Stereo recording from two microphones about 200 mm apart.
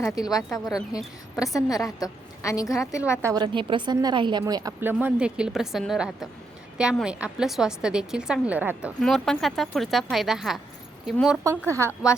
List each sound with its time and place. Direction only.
0.0 s a woman's voice: 20° left (ahead or behind)
3.2 s a woman's voice: 15° right (ahead or behind); by 11.3 s centre (ahead or behind)
11.4 s speech: 15° right (ahead or behind)